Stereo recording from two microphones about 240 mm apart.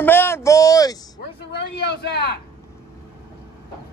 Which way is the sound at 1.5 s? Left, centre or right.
Left.